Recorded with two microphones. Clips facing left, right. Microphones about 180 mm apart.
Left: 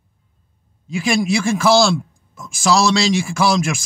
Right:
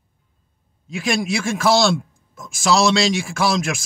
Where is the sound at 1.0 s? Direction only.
Centre (ahead or behind).